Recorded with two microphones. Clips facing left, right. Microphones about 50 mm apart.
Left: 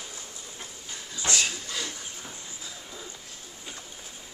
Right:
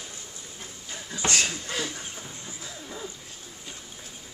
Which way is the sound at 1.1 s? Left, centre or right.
Right.